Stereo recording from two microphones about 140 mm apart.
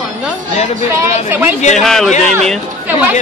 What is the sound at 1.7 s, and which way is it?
Speech, 5° left (ahead or behind).